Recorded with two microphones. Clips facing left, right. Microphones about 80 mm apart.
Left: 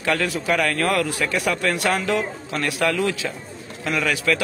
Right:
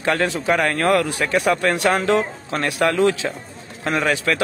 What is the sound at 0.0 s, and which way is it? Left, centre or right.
A man's voice, right.